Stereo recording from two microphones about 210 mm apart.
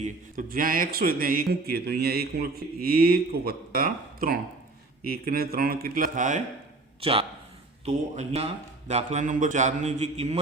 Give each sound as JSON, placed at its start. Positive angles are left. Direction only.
{"t": 0.0, "sound": "a man's voice", "side_deg": -40}
{"t": 7.0, "sound": "speech", "side_deg": -25}